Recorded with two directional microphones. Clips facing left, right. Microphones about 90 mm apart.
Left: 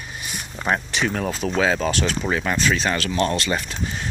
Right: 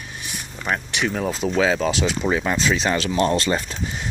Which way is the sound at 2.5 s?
25° right (ahead or behind).